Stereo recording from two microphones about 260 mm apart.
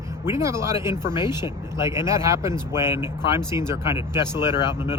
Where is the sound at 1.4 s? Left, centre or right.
Centre.